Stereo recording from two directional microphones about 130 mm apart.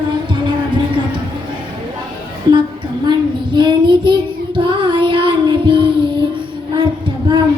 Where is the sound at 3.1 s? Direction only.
35° right (ahead or behind).